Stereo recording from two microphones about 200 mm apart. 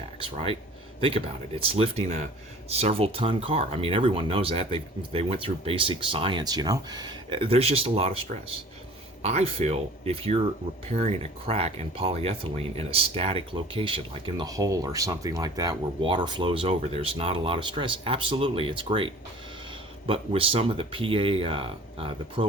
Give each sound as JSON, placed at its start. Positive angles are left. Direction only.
{"t": 0.2, "sound": "speech", "side_deg": -25}